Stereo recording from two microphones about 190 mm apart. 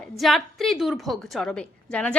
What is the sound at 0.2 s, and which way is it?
A woman's voice, centre (ahead or behind).